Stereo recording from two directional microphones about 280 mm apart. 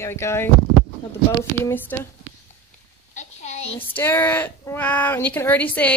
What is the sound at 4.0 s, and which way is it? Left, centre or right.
A woman's voice, centre.